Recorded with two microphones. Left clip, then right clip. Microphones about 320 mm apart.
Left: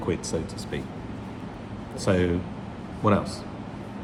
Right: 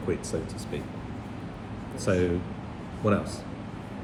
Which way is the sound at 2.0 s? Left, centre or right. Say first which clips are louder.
Left 2 dB; left.